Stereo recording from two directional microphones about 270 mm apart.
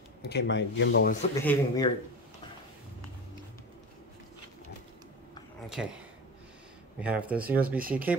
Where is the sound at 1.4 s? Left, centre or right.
Centre.